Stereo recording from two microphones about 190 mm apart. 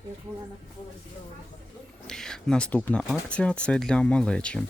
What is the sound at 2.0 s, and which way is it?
Speech, 5° left (ahead or behind).